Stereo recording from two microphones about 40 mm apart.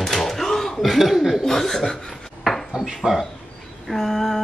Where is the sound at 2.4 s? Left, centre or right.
Centre.